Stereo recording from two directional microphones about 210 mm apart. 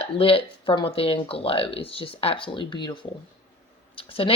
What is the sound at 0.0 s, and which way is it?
A woman's voice, 25° left (ahead or behind).